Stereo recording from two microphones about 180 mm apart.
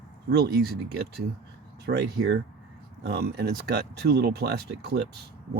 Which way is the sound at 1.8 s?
65° right (ahead or behind).